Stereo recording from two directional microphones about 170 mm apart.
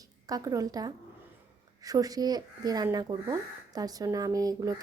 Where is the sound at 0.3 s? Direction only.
20° right (ahead or behind).